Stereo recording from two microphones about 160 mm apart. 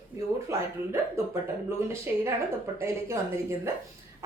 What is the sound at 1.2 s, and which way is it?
Speech, 20° right (ahead or behind).